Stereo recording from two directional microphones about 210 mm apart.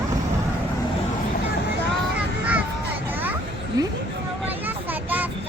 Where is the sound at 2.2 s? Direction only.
5° right (ahead or behind).